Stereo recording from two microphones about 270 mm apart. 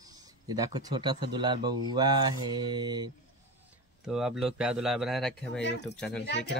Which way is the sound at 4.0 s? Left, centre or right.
Centre.